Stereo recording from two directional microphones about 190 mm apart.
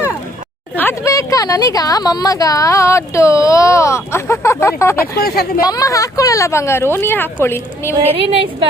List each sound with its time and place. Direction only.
0.8 s a woman's voice: 15° left (ahead or behind)
5.1 s speech: 55° left (ahead or behind)
5.6 s a woman's voice: 20° left (ahead or behind)